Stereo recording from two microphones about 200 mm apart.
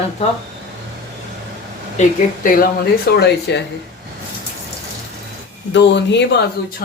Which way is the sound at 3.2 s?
55° left (ahead or behind).